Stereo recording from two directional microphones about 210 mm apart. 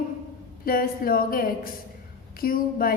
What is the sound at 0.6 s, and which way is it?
A woman's voice, 45° left (ahead or behind).